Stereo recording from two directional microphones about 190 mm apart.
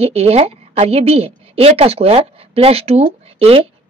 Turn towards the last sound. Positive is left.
turn(degrees=-30)  # may be behind; listen again after turning